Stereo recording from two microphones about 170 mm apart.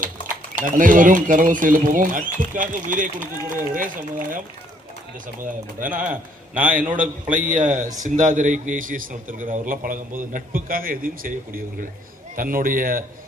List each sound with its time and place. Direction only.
0.0 s speech: 50° right (ahead or behind)
6.6 s a man's voice: 10° right (ahead or behind)
7.3 s a man's voice: 50° right (ahead or behind)